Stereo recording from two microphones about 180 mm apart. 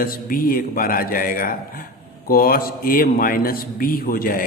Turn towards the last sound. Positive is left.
turn(degrees=50)  # may be behind; listen again after turning